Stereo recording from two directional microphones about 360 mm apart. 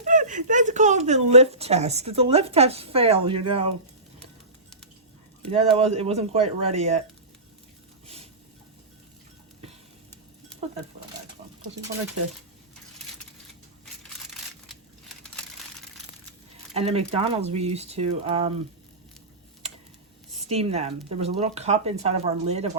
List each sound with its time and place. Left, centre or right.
0.0 s speech: right
5.5 s speech: centre
10.5 s a sound: centre
14.7 s crumpling: centre
16.7 s speech: centre
20.3 s speech: centre